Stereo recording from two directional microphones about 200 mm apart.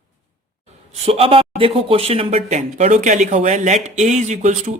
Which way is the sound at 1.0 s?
30° right (ahead or behind).